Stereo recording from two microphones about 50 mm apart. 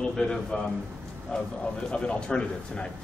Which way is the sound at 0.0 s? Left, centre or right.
Centre.